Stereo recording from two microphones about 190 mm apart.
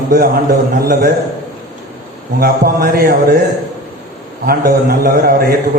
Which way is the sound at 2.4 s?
55° right (ahead or behind).